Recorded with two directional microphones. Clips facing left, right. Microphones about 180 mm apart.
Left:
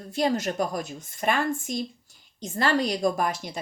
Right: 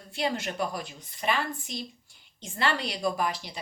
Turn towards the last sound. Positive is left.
turn(degrees=45)  # may be behind; listen again after turning